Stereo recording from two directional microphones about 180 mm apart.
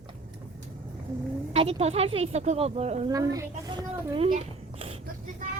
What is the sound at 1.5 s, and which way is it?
Speech, 35° right (ahead or behind).